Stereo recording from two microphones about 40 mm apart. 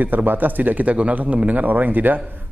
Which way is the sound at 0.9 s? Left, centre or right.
Right.